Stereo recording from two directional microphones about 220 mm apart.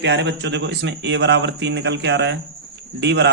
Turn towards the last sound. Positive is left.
turn(degrees=-50)  # may be behind; listen again after turning